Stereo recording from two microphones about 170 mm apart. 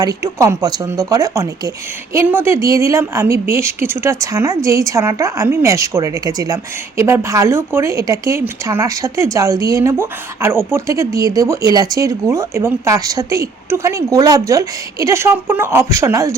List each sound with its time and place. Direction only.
0.0 s speech: 20° right (ahead or behind)